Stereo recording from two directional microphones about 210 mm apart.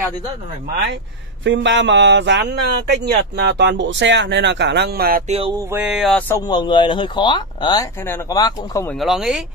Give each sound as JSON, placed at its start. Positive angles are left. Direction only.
{"t": 1.4, "sound": "speech", "side_deg": -60}
{"t": 5.6, "sound": "speech", "side_deg": -10}
{"t": 8.9, "sound": "speech", "side_deg": 0}